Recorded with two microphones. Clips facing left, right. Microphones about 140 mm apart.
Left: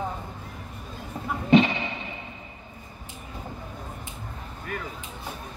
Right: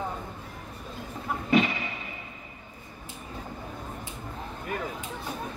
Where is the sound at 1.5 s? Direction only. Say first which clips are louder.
Left 5 dB; 25° left (ahead or behind).